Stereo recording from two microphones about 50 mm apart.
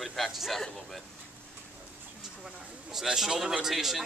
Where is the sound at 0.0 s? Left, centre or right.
Centre.